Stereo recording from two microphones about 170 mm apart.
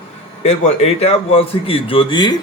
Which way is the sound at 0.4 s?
40° left (ahead or behind).